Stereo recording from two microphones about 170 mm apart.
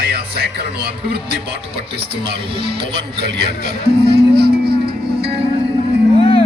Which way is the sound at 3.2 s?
70° right (ahead or behind).